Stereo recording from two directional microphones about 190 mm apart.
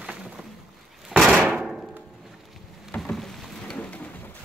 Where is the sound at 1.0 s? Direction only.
Centre (ahead or behind).